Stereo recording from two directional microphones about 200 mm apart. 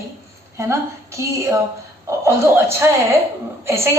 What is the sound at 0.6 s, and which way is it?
A woman's voice, 15° right (ahead or behind).